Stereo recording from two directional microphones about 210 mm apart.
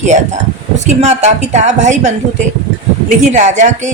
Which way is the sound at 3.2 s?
35° right (ahead or behind).